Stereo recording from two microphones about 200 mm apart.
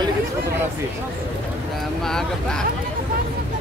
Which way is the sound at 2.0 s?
5° left (ahead or behind).